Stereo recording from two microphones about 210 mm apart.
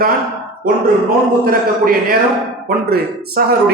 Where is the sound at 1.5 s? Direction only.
45° right (ahead or behind).